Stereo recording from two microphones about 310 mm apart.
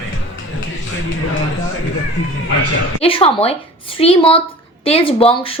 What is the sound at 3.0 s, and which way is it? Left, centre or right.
A woman's voice, centre.